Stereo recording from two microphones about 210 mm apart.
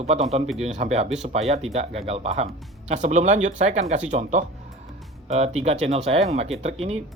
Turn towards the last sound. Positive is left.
turn(degrees=-30)  # may be behind; listen again after turning